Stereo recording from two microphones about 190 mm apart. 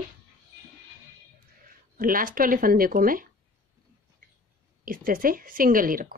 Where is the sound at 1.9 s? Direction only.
45° right (ahead or behind).